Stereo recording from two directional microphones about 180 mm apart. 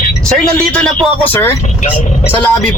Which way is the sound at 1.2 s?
10° left (ahead or behind).